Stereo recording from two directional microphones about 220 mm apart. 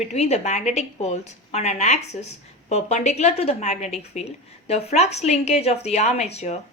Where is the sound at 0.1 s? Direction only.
30° left (ahead or behind).